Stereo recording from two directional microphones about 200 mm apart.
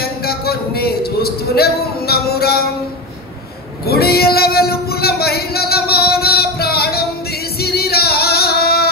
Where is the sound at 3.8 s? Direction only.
50° left (ahead or behind).